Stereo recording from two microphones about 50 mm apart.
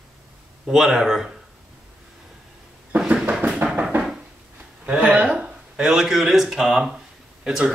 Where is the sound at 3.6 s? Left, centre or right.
Right.